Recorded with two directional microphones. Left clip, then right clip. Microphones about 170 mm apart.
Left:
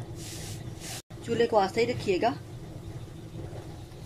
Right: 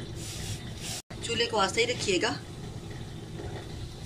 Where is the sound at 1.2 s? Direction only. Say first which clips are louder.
Left 3 dB; 40° left (ahead or behind).